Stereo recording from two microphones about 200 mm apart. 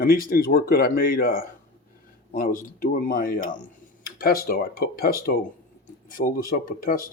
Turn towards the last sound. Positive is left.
turn(degrees=45)  # may be behind; listen again after turning